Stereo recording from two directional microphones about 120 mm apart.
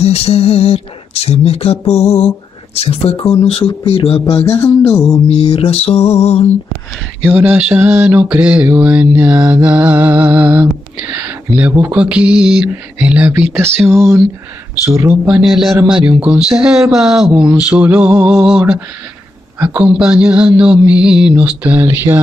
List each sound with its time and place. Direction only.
0.0 s a sound: 60° left (ahead or behind)
4.4 s music: 25° left (ahead or behind)
5.3 s a sound: 50° left (ahead or behind)
7.2 s mantra: 15° right (ahead or behind)
11.7 s speech: 20° right (ahead or behind)
12.0 s mantra: 10° right (ahead or behind)
13.8 s speech: 25° right (ahead or behind)
15.2 s a man's voice: 5° right (ahead or behind)
15.8 s mantra: 10° right (ahead or behind)